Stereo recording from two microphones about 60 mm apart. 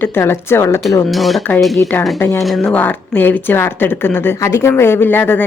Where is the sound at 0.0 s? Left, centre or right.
Left.